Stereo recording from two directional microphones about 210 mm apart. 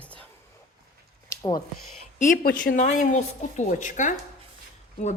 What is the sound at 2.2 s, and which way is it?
A woman's voice, 40° left (ahead or behind).